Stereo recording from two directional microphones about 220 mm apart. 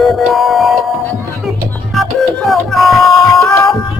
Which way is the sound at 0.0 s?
Centre (ahead or behind).